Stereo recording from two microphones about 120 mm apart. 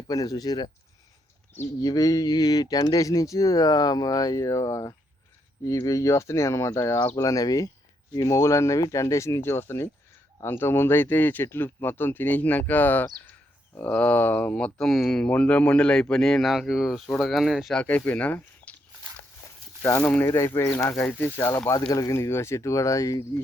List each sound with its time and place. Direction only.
0.1 s speech: 30° left (ahead or behind)
1.8 s speech: 30° left (ahead or behind); by 17.8 s centre (ahead or behind)
17.8 s speech: 10° left (ahead or behind)
19.8 s speech: 20° left (ahead or behind)
21.7 s speech: 30° left (ahead or behind)